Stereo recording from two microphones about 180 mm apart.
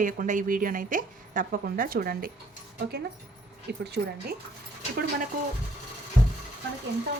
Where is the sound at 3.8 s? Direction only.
65° right (ahead or behind).